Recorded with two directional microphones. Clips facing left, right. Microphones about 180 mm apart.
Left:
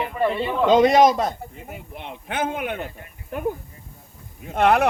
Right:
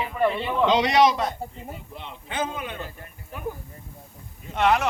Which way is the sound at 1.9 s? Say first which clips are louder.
Left 3 dB; 60° left (ahead or behind).